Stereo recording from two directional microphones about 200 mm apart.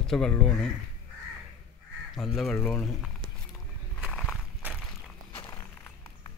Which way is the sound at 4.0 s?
Centre (ahead or behind).